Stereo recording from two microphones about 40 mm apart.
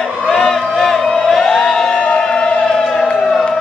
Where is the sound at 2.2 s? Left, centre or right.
Centre.